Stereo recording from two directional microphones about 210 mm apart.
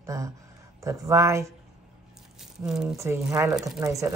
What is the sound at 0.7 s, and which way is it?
Speech, 15° right (ahead or behind).